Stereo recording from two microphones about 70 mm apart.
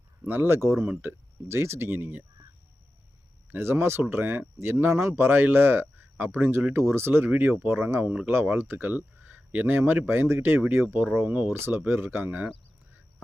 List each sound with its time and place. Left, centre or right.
0.3 s speech: right
3.5 s speech: right
8.0 s speech: centre
8.3 s speech: right